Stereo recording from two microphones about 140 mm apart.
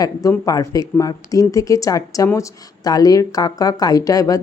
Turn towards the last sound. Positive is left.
turn(degrees=25)  # may be behind; listen again after turning